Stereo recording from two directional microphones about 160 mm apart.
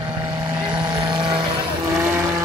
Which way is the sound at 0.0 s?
30° right (ahead or behind).